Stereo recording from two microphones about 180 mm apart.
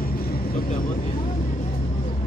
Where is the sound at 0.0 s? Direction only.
55° left (ahead or behind).